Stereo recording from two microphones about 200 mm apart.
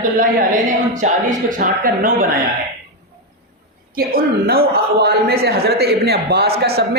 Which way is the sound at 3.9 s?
50° right (ahead or behind).